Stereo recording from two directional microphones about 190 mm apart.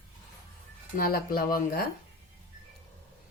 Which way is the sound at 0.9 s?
50° left (ahead or behind).